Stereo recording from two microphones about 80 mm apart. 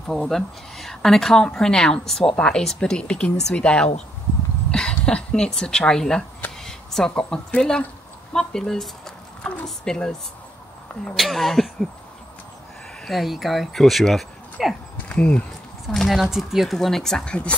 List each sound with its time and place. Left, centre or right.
0.0 s a woman's voice: centre
8.3 s a sound: centre
9.8 s a woman's voice: centre
13.0 s speech: centre
15.0 s speech: centre
15.9 s speech: centre